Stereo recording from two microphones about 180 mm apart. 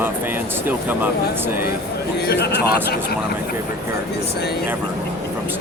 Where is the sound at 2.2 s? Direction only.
65° left (ahead or behind).